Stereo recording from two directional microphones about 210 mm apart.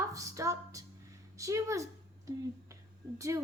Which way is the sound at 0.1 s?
15° right (ahead or behind).